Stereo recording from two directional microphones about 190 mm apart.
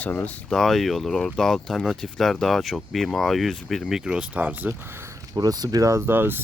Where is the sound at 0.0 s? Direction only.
5° left (ahead or behind).